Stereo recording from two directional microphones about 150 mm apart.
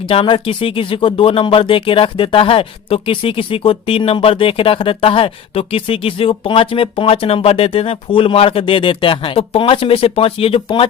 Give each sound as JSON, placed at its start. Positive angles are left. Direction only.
{"t": 0.0, "sound": "speech", "side_deg": 35}